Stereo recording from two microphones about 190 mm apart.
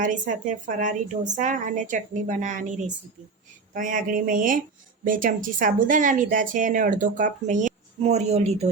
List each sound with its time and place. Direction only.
0.0 s a woman's voice: 45° right (ahead or behind)